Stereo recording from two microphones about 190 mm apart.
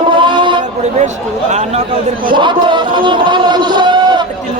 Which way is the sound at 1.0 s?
40° right (ahead or behind).